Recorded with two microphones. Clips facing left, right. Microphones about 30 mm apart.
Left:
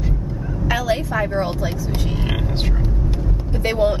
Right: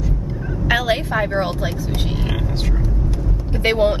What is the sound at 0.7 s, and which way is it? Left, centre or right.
Speech, right.